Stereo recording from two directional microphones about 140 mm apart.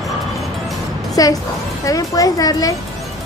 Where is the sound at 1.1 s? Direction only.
25° left (ahead or behind).